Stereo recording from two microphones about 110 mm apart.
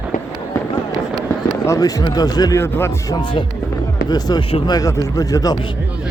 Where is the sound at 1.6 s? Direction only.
30° left (ahead or behind).